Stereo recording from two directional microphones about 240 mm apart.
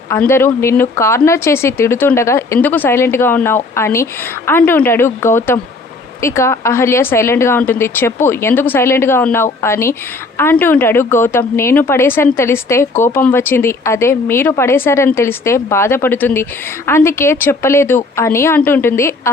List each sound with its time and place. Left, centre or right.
0.1 s speech: centre